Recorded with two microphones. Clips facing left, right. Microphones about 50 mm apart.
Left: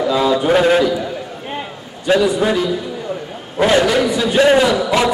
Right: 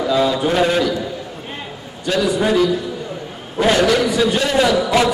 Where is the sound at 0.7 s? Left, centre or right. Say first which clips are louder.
Left 4 dB; centre.